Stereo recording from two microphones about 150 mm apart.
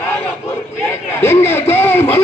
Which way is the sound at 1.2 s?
15° left (ahead or behind).